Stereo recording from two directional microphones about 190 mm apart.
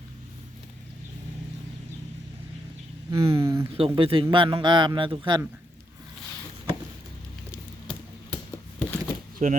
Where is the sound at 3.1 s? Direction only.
30° right (ahead or behind).